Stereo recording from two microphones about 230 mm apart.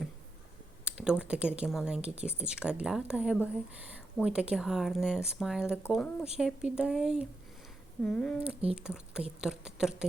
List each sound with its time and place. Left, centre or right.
0.9 s speech: centre